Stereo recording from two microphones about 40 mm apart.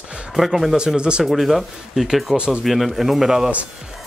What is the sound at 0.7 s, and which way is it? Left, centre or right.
Speech, right.